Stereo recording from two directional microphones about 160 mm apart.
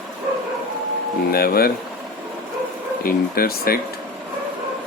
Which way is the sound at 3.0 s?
70° left (ahead or behind).